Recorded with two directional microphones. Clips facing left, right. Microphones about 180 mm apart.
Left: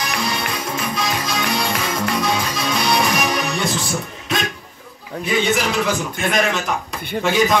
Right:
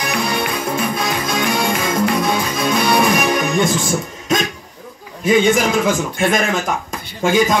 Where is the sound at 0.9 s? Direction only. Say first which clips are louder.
Right 3 dB; 55° right (ahead or behind).